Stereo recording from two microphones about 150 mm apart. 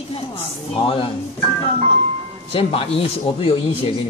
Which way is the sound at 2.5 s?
40° left (ahead or behind).